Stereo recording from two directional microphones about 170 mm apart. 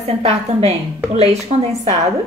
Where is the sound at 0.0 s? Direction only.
40° right (ahead or behind).